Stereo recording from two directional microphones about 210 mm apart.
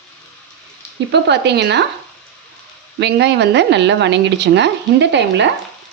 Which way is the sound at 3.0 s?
55° right (ahead or behind).